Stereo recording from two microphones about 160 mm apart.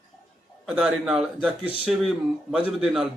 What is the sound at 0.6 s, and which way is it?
Speech, 5° right (ahead or behind).